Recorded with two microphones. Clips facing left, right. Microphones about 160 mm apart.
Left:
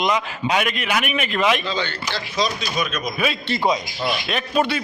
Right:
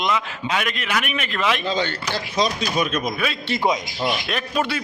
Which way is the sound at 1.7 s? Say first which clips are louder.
Right 2 dB; 45° right (ahead or behind).